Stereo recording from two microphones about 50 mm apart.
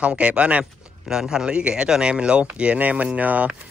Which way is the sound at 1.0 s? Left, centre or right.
Centre.